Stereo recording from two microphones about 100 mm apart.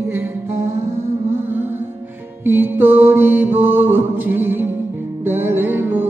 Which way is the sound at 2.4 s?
20° right (ahead or behind).